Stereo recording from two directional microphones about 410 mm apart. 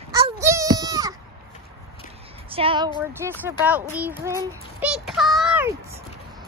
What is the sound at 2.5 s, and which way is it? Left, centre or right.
A child's voice, centre.